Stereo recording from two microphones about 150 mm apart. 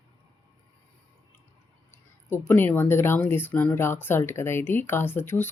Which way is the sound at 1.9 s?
15° left (ahead or behind).